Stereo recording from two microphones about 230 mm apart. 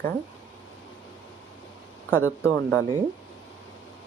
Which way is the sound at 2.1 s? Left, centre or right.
Centre.